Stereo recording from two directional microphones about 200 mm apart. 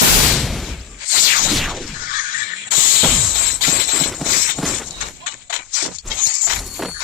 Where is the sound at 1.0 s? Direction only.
45° left (ahead or behind).